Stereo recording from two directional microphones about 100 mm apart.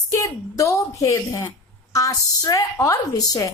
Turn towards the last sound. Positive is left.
turn(degrees=35)  # may be behind; listen again after turning